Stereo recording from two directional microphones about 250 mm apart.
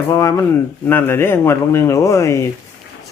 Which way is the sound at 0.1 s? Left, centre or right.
Centre.